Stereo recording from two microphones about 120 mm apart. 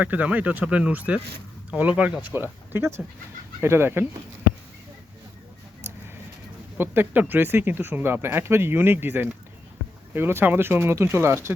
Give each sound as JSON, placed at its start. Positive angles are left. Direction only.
{"t": 0.0, "sound": "speech", "side_deg": -15}
{"t": 6.7, "sound": "speech", "side_deg": -15}